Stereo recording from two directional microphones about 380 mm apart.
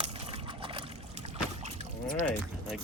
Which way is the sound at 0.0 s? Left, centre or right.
Centre.